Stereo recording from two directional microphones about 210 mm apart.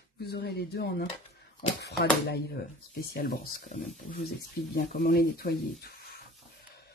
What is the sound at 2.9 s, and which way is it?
Speech, 50° left (ahead or behind).